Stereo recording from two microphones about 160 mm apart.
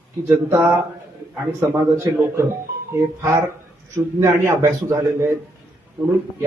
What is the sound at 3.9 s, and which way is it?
A man's voice, 15° right (ahead or behind).